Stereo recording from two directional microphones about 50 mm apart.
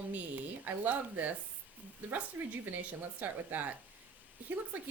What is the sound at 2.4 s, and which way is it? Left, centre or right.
Speech, right.